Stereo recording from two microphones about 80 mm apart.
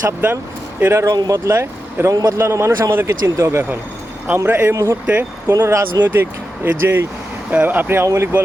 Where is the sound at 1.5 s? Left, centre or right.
Right.